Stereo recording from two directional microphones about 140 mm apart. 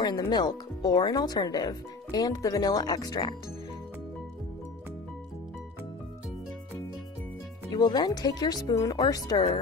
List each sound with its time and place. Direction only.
0.0 s speech: 30° left (ahead or behind)
7.7 s speech: 30° left (ahead or behind)